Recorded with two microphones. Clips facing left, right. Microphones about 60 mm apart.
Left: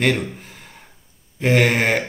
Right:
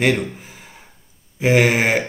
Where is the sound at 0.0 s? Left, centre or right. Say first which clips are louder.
Right 1 dB; centre.